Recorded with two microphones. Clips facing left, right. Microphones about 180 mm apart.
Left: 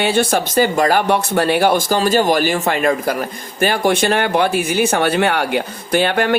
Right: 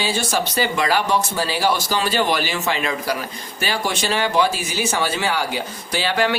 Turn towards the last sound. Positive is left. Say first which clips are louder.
# left 5 dB
turn(degrees=55)  # may be behind; listen again after turning